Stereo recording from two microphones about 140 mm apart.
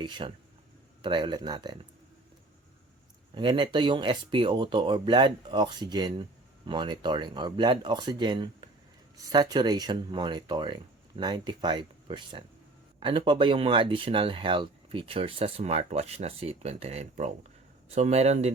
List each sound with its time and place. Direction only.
0.0 s speech: 35° right (ahead or behind)
3.3 s speech: 35° right (ahead or behind); by 18.5 s 50° right (ahead or behind)